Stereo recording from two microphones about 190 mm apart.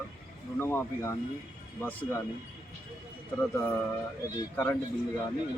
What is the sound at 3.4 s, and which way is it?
Speech, 10° left (ahead or behind).